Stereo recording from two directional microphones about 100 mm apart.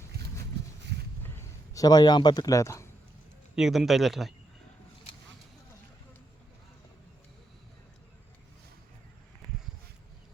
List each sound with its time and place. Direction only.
1.7 s speech: 40° left (ahead or behind)
3.5 s speech: 5° right (ahead or behind)